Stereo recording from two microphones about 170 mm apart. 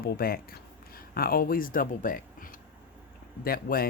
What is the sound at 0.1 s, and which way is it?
Speech, 60° left (ahead or behind).